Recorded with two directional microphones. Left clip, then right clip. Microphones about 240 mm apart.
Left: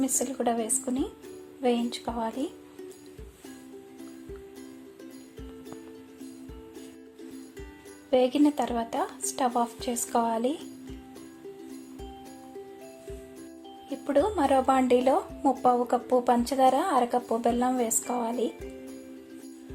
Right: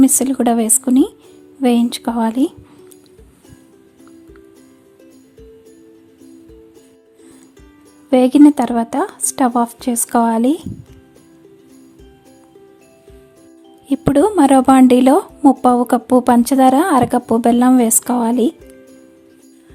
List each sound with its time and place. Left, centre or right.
0.0 s a woman's voice: right
8.1 s a woman's voice: right
13.9 s a woman's voice: right